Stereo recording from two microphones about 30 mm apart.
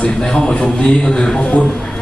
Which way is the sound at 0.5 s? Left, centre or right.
Left.